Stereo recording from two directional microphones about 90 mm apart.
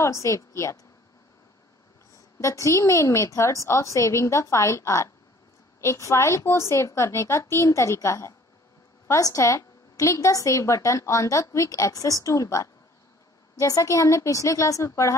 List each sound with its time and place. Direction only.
0.0 s a woman's voice: 35° left (ahead or behind)
2.3 s a woman's voice: 35° left (ahead or behind)